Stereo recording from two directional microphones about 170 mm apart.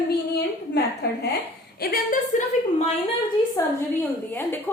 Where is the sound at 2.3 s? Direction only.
45° left (ahead or behind).